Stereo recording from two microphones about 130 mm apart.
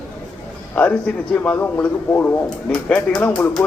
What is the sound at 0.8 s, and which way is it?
Speech, 10° left (ahead or behind).